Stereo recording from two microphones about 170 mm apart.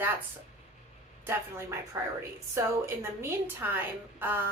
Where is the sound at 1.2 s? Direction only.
15° right (ahead or behind).